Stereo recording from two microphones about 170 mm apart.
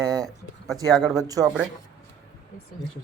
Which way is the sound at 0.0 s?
20° right (ahead or behind).